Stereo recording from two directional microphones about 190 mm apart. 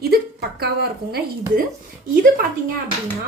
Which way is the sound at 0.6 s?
55° right (ahead or behind).